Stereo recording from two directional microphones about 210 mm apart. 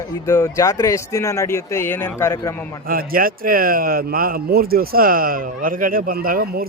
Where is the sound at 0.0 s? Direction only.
15° left (ahead or behind).